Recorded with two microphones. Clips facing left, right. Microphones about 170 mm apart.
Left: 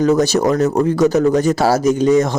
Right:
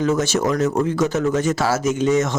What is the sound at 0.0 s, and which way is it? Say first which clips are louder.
Speech: left 5 dB; 35° left (ahead or behind).